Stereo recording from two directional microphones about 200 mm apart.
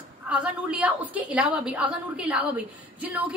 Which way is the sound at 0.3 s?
5° right (ahead or behind).